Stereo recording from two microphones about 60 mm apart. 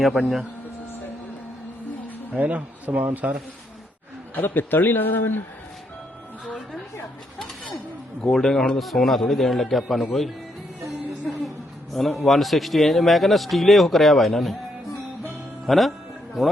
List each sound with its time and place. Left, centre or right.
0.0 s speech: centre
2.4 s a man's voice: right
4.4 s a man's voice: left
7.3 s a sound: centre
8.2 s a man's voice: centre
11.3 s speech: centre
15.6 s speech: centre